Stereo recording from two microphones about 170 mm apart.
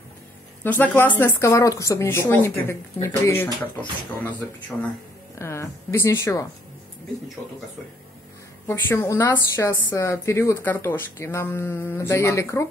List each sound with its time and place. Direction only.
0.7 s a woman's voice: 10° left (ahead or behind)
8.6 s a woman's voice: 15° left (ahead or behind)